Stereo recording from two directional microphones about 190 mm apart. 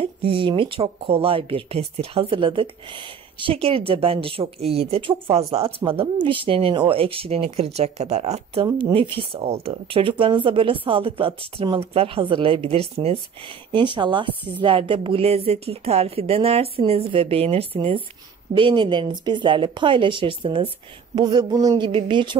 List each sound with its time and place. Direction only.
0.0 s speech: 30° right (ahead or behind)
5.8 s speech: 15° right (ahead or behind)
6.2 s speech: 25° right (ahead or behind)
8.6 s a woman's voice: 25° right (ahead or behind)